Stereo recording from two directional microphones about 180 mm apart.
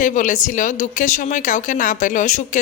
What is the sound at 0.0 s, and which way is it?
Speech, 45° left (ahead or behind).